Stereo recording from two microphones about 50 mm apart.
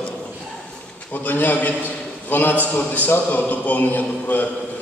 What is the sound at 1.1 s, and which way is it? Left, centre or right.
A man's voice, left.